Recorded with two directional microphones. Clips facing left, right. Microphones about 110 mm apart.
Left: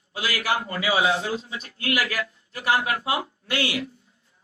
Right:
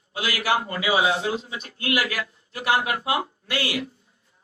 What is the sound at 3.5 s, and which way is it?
Speech, 25° left (ahead or behind).